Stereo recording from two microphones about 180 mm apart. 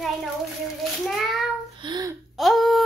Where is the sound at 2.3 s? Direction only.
Centre (ahead or behind).